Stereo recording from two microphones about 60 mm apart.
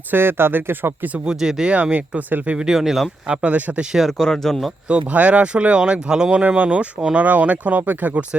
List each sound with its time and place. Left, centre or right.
0.1 s speech: right
1.1 s speech: centre
1.7 s speech: right; by 3.1 s centre
3.2 s speech: centre
4.2 s speech: centre
4.9 s speech: right